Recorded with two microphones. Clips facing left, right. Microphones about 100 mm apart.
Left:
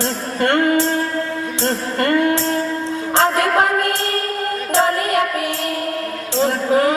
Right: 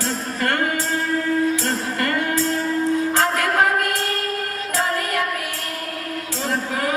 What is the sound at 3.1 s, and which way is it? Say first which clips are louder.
Music: left 4 dB; 30° left (ahead or behind).